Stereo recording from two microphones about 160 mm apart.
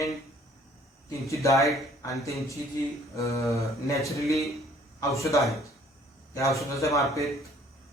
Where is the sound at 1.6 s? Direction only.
20° left (ahead or behind).